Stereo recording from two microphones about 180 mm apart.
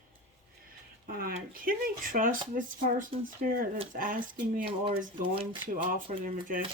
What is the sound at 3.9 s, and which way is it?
Speech, 50° right (ahead or behind).